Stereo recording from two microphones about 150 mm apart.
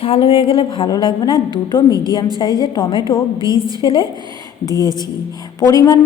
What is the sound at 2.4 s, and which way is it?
Speech, 25° right (ahead or behind).